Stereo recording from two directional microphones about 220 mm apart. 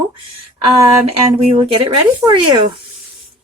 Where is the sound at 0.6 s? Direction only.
30° right (ahead or behind).